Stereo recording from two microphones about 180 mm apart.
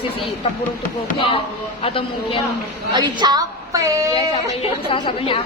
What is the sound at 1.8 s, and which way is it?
Speech, 30° left (ahead or behind).